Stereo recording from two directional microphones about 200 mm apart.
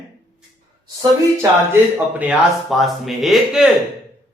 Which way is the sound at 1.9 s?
10° right (ahead or behind).